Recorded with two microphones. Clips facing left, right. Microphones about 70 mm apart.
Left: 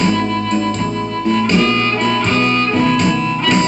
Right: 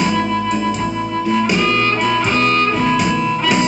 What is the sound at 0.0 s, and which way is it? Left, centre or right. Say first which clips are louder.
Music: left 1 dB; centre.